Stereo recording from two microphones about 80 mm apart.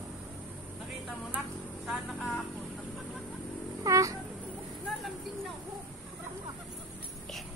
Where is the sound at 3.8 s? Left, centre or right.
Right.